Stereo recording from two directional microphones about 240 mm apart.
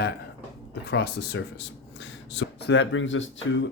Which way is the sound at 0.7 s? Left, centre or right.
Left.